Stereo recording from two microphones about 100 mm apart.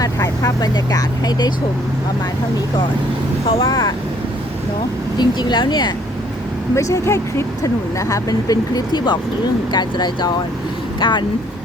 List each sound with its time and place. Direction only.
0.0 s speech: 40° left (ahead or behind)
3.4 s speech: 65° left (ahead or behind)
5.1 s speech: 45° left (ahead or behind)
6.7 s speech: 30° left (ahead or behind); by 11.3 s 50° left (ahead or behind)